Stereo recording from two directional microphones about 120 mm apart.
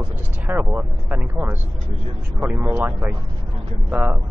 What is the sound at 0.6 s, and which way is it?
Speech, 15° right (ahead or behind).